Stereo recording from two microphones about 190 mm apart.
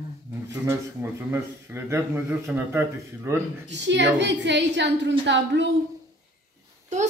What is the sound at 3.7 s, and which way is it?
A woman's voice, 70° right (ahead or behind).